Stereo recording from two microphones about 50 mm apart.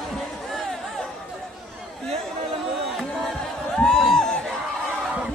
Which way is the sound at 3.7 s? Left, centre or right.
Centre.